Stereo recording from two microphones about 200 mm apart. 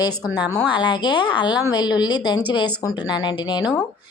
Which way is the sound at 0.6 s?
25° left (ahead or behind).